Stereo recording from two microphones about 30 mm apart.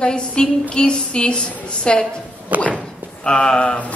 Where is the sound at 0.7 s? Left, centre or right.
Left.